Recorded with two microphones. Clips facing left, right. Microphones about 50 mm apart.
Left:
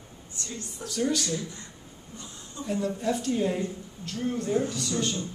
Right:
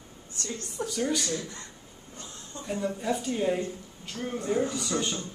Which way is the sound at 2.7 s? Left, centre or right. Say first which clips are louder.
Left 1 dB; centre.